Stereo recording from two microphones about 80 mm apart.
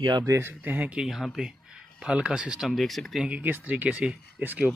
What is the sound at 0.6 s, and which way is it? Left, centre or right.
Speech, centre.